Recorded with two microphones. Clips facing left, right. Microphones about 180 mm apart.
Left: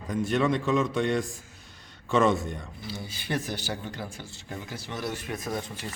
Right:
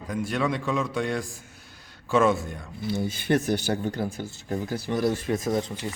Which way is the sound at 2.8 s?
50° right (ahead or behind).